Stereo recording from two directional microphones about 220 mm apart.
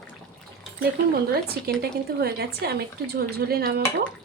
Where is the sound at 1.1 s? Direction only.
45° right (ahead or behind).